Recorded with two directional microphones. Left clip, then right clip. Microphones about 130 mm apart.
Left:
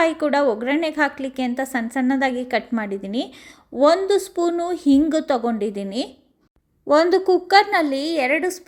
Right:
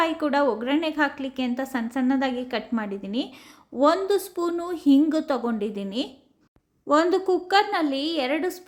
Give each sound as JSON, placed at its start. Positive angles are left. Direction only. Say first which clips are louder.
{"t": 0.0, "sound": "a woman's voice", "louder": "left 4 dB", "side_deg": 35}
{"t": 6.8, "sound": "a woman's voice", "louder": "left 5 dB", "side_deg": 25}
{"t": 8.3, "sound": "a woman's voice", "louder": "left 5 dB", "side_deg": 20}